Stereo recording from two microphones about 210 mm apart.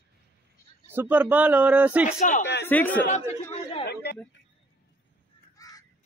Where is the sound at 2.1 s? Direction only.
35° left (ahead or behind).